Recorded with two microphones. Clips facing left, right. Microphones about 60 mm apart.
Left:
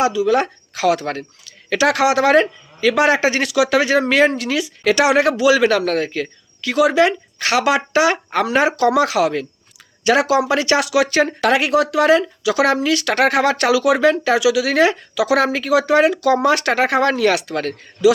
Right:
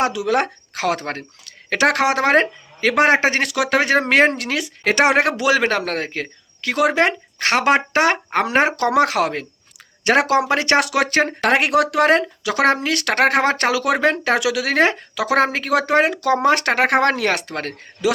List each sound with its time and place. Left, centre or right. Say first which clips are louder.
0.0 s speech: left 3 dB; right